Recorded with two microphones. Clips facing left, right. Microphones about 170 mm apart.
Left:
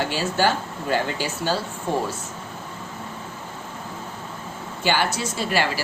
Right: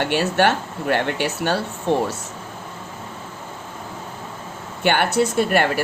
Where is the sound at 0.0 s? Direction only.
65° right (ahead or behind).